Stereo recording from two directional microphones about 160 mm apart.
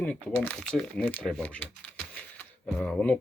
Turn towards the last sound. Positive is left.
turn(degrees=10)  # may be behind; listen again after turning